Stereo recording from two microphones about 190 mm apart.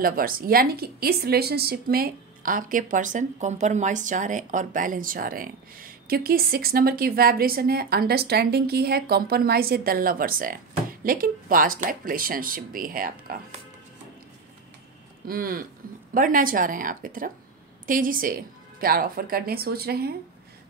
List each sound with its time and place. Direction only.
0.0 s a woman's voice: 50° right (ahead or behind)
15.2 s a woman's voice: 50° right (ahead or behind)